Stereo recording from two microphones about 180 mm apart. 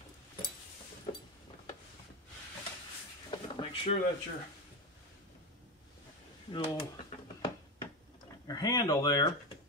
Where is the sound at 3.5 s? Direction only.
30° left (ahead or behind).